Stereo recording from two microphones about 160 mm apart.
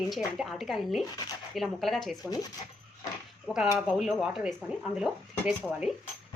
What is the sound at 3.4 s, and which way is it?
Speech, 5° right (ahead or behind).